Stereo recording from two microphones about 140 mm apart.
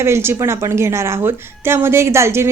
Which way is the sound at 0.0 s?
20° right (ahead or behind).